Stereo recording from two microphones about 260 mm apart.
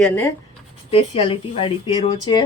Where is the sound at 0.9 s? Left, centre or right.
Left.